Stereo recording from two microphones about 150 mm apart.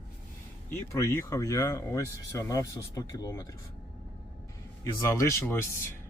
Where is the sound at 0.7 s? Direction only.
20° left (ahead or behind).